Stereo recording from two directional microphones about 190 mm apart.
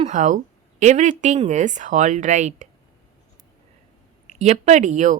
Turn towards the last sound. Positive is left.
turn(degrees=-40)  # may be behind; listen again after turning